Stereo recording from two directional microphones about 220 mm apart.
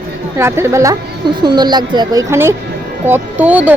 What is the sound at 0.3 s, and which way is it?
A woman's voice, 10° right (ahead or behind).